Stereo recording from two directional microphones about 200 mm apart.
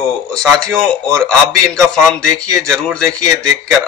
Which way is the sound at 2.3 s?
15° right (ahead or behind).